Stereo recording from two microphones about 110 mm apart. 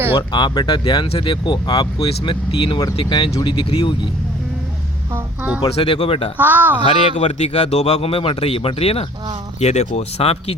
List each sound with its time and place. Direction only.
0.2 s speech: 40° left (ahead or behind)
2.0 s speech: 50° left (ahead or behind)
5.1 s a sound: 15° right (ahead or behind)
5.7 s speech: 50° left (ahead or behind)
6.3 s speech: 15° right (ahead or behind)
6.8 s a man's voice: 75° left (ahead or behind)
9.6 s a man's voice: 90° left; by 10.5 s 65° left (ahead or behind)